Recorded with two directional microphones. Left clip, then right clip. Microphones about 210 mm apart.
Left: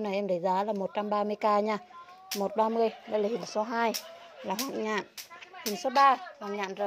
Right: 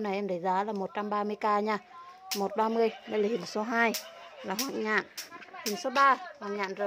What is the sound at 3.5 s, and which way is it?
Speech, 45° right (ahead or behind).